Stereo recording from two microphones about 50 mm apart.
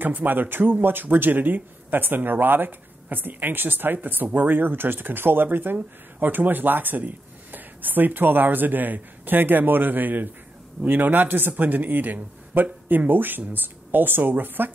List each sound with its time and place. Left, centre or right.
0.0 s speech: right